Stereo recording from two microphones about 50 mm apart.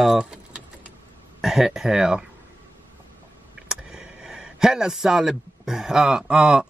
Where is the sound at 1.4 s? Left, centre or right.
Centre.